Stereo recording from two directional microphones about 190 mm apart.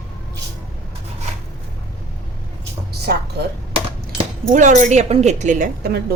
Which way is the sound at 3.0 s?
55° right (ahead or behind).